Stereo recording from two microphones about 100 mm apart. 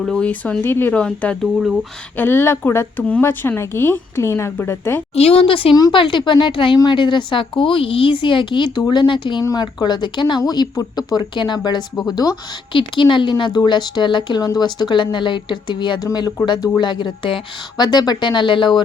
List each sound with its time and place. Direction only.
0.0 s speech: 5° left (ahead or behind)
0.3 s speech: 15° left (ahead or behind)
1.5 s speech: 5° right (ahead or behind)
2.1 s speech: 20° left (ahead or behind)
5.1 s a woman's voice: 85° left; by 5.7 s 65° left (ahead or behind)
5.9 s a woman's voice: 55° left (ahead or behind)
9.4 s a woman's voice: 40° left (ahead or behind)
12.7 s a woman's voice: 55° left (ahead or behind)